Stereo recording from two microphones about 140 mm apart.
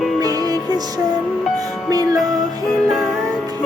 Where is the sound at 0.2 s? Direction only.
25° right (ahead or behind).